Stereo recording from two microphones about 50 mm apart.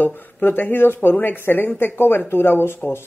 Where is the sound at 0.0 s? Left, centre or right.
Left.